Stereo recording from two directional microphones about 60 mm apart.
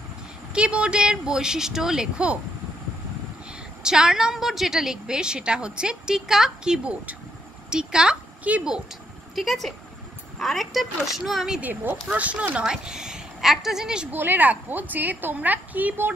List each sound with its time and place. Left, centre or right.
0.5 s a woman's voice: centre
3.8 s a woman's voice: centre
9.3 s a woman's voice: centre
11.6 s a woman's voice: right; by 14.0 s centre
14.1 s a woman's voice: right